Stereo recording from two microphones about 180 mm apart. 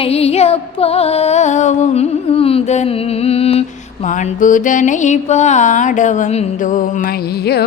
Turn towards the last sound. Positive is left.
turn(degrees=45)  # may be behind; listen again after turning